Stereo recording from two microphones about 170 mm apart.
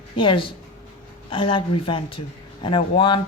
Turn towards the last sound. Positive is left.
turn(degrees=30)  # may be behind; listen again after turning